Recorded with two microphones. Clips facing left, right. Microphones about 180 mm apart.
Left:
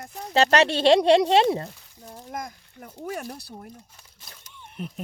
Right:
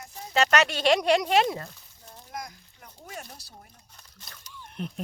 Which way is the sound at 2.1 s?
50° left (ahead or behind).